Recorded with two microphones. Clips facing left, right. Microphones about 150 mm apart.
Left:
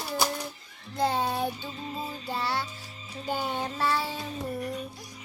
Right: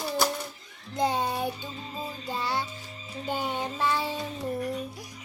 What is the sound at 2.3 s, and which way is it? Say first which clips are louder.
Music: right 1 dB; 15° right (ahead or behind).